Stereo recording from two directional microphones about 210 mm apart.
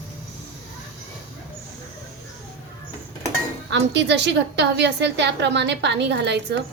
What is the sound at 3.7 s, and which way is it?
A woman's voice, 55° right (ahead or behind).